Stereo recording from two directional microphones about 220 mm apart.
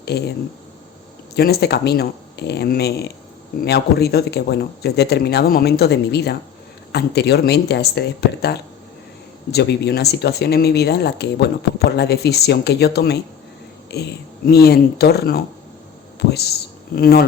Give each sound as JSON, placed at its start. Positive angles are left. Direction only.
{"t": 0.0, "sound": "a man's voice", "side_deg": 45}
{"t": 1.4, "sound": "speech", "side_deg": 45}